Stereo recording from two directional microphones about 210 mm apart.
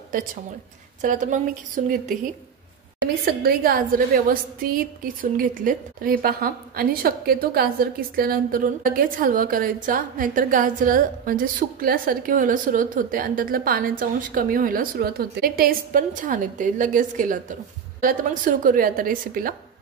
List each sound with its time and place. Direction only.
0.1 s a woman's voice: 40° right (ahead or behind)
3.3 s a woman's voice: 45° right (ahead or behind)